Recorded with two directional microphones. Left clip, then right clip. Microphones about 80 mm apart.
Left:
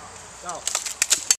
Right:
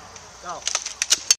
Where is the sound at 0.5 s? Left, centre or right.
Right.